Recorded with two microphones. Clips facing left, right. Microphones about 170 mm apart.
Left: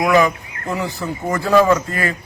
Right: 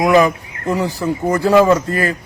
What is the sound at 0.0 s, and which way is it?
A man's voice, 30° right (ahead or behind).